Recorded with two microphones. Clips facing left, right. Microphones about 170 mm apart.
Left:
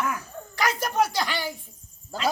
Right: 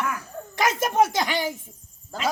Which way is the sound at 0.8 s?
20° right (ahead or behind).